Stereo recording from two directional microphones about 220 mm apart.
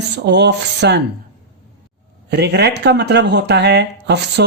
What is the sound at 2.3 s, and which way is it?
Speech, 50° right (ahead or behind).